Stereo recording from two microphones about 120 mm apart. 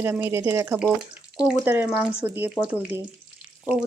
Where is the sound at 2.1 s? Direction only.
15° right (ahead or behind).